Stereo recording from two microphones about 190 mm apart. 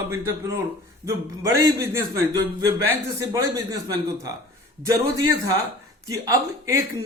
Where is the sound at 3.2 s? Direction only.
15° right (ahead or behind).